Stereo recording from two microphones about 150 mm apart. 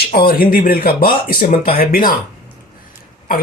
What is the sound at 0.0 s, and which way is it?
Speech, 80° left.